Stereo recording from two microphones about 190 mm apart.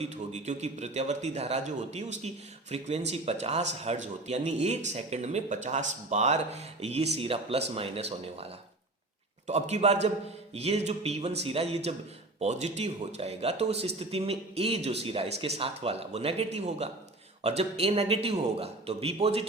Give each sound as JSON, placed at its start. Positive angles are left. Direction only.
{"t": 0.0, "sound": "a man's voice", "side_deg": -35}
{"t": 9.5, "sound": "a man's voice", "side_deg": -35}